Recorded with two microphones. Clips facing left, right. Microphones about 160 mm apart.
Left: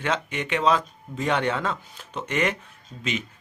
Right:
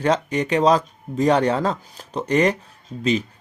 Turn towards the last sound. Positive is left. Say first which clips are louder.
# right 9 dB
turn(degrees=-35)  # may be behind; listen again after turning